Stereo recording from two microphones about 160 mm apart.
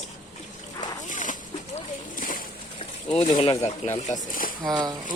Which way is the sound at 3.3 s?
35° left (ahead or behind).